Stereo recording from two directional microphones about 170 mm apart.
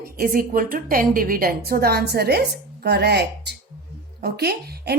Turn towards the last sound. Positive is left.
turn(degrees=-70)  # may be behind; listen again after turning